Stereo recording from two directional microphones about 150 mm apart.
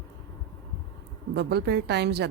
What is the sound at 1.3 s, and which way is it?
Speech, 90° right.